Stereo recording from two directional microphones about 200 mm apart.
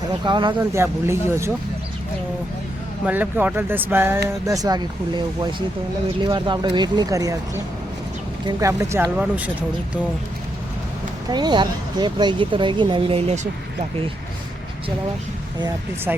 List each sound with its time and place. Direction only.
0.3 s speech: 20° right (ahead or behind)
3.1 s speech: 10° right (ahead or behind)
11.3 s speech: 20° right (ahead or behind)
16.1 s speech: 5° right (ahead or behind)